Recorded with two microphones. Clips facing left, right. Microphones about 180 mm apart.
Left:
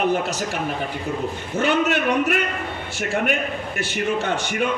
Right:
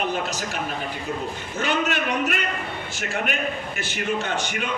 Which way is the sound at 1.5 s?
60° left (ahead or behind).